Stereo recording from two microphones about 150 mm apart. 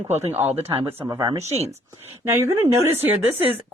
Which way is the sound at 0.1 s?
45° right (ahead or behind).